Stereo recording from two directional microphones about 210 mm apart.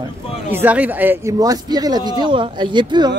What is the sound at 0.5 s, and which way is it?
Speech, 10° right (ahead or behind).